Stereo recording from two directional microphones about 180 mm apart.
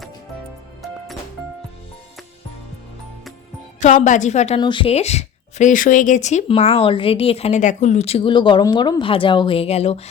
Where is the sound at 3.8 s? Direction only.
40° left (ahead or behind).